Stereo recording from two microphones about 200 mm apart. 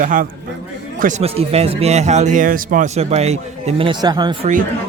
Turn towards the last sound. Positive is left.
turn(degrees=-25)  # may be behind; listen again after turning